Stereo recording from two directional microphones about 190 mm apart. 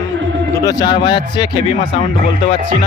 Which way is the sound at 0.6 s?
20° left (ahead or behind).